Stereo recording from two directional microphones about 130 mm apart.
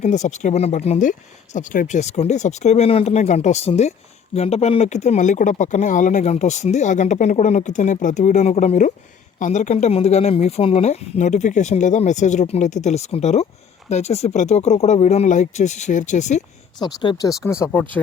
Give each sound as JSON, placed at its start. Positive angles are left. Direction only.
{"t": 0.0, "sound": "speech", "side_deg": 65}
{"t": 1.5, "sound": "speech", "side_deg": 85}
{"t": 16.8, "sound": "speech", "side_deg": 35}
{"t": 17.6, "sound": "speech", "side_deg": 15}